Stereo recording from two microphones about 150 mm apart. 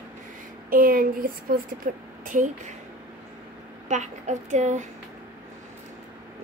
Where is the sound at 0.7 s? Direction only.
70° right (ahead or behind).